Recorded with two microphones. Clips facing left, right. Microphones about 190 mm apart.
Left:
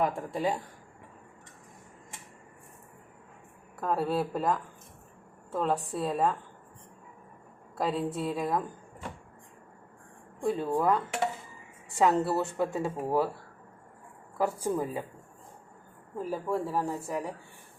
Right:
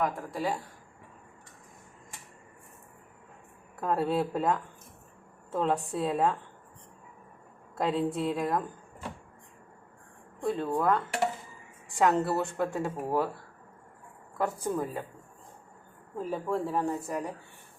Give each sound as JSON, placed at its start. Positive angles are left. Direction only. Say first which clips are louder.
{"t": 0.0, "sound": "speech", "louder": "left 2 dB", "side_deg": 20}
{"t": 3.8, "sound": "speech", "louder": "right 1 dB", "side_deg": 0}
{"t": 7.8, "sound": "speech", "louder": "right 2 dB", "side_deg": 0}
{"t": 10.4, "sound": "a woman's voice", "louder": "left 1 dB", "side_deg": 10}
{"t": 14.3, "sound": "a woman's voice", "louder": "left 1 dB", "side_deg": 10}
{"t": 16.1, "sound": "speech", "louder": "even", "side_deg": 5}